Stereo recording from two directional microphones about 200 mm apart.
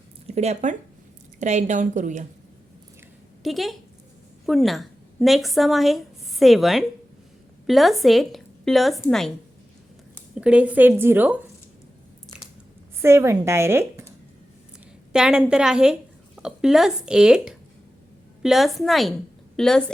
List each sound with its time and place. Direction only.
0.3 s a woman's voice: 35° right (ahead or behind)
3.4 s a woman's voice: centre (ahead or behind)
10.3 s a woman's voice: 5° right (ahead or behind)
13.0 s a woman's voice: 15° right (ahead or behind)
15.1 s a woman's voice: 5° right (ahead or behind)